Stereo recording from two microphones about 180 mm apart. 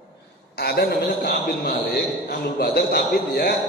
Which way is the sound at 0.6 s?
60° left (ahead or behind).